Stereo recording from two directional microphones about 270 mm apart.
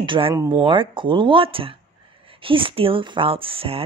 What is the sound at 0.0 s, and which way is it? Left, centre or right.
A woman's voice, centre.